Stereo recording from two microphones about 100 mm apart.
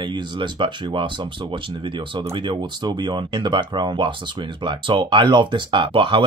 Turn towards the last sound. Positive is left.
turn(degrees=-55)  # may be behind; listen again after turning